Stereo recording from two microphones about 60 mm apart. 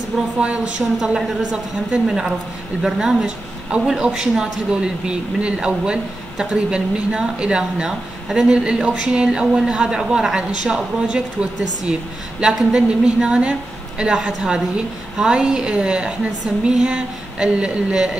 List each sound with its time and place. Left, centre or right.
0.4 s speech: centre
12.4 s speech: centre